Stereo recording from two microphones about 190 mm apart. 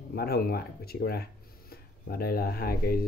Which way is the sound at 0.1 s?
55° left (ahead or behind).